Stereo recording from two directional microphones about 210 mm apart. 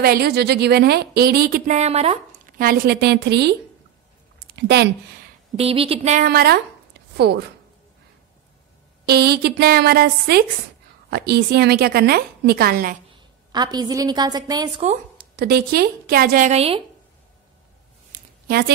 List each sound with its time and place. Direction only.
0.0 s speech: 50° right (ahead or behind); by 2.1 s 30° right (ahead or behind)
2.6 s speech: 45° right (ahead or behind)
4.6 s speech: 50° right (ahead or behind)
5.6 s a woman's voice: 25° right (ahead or behind)
6.2 s a woman's voice: 45° right (ahead or behind)
9.0 s speech: 50° right (ahead or behind)
13.1 s a woman's voice: 20° right (ahead or behind)
15.1 s speech: 50° right (ahead or behind); by 16.8 s 30° right (ahead or behind)
18.1 s a sound: 50° right (ahead or behind)